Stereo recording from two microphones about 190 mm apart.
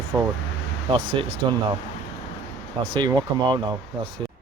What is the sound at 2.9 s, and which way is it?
Speech, 25° right (ahead or behind).